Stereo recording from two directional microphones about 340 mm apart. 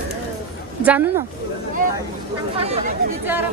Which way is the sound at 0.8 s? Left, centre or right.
Centre.